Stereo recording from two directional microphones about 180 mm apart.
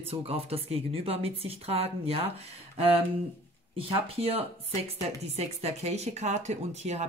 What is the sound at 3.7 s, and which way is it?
Speech, 30° right (ahead or behind).